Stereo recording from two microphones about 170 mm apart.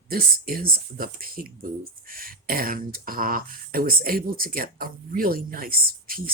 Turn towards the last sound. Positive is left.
turn(degrees=-60)  # may be behind; listen again after turning